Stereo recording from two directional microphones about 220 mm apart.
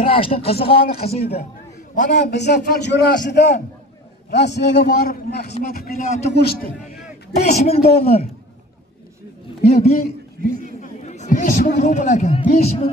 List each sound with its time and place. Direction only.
0.0 s speech: 25° left (ahead or behind)
2.1 s a man's voice: 50° left (ahead or behind); by 6.3 s 30° left (ahead or behind)
6.4 s a man's voice: 45° left (ahead or behind)
7.3 s speech: 30° left (ahead or behind)
9.7 s speech: 30° left (ahead or behind)
10.4 s a man's voice: 40° right (ahead or behind)
10.8 s a man's voice: 35° left (ahead or behind)